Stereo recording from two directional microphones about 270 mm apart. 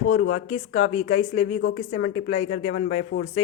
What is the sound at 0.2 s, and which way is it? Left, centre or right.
Speech, left.